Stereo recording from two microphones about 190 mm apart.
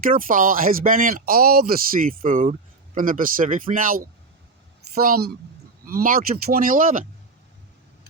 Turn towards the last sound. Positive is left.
turn(degrees=-45)  # may be behind; listen again after turning